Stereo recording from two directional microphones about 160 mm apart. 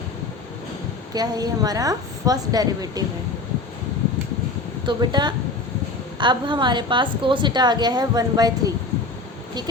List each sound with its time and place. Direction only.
1.1 s a woman's voice: 25° right (ahead or behind)
4.9 s a woman's voice: 25° right (ahead or behind)